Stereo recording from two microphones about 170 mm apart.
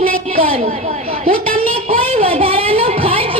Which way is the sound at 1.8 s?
35° right (ahead or behind).